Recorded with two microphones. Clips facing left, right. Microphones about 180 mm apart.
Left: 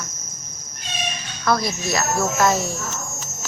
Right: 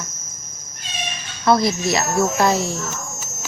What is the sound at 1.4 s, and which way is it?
Speech, 25° right (ahead or behind).